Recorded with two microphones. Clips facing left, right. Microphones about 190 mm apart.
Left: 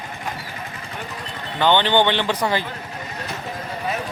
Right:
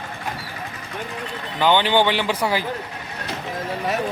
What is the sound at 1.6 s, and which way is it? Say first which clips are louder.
Speech: even; 5° right (ahead or behind).